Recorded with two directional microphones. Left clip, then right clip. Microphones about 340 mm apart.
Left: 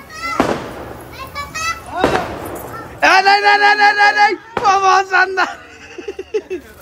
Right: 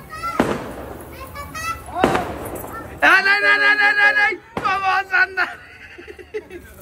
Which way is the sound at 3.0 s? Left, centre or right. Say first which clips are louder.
Left 3 dB; centre.